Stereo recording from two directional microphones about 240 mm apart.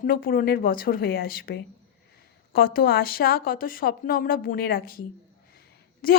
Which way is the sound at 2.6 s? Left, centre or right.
Left.